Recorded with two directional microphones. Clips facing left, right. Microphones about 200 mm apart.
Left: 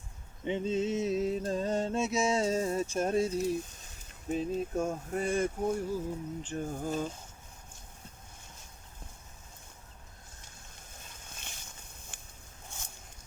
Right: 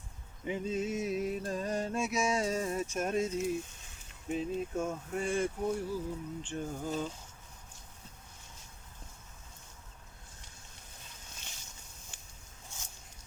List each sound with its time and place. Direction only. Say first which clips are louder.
0.4 s mantra: left 3 dB; 25° left (ahead or behind)
4.3 s speech: left 2 dB; 40° left (ahead or behind)
11.1 s a sound: left 3 dB; 55° left (ahead or behind)
12.7 s zipper: left 3 dB; 55° left (ahead or behind)